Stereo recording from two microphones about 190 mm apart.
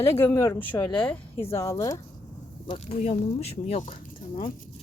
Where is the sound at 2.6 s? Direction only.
35° left (ahead or behind).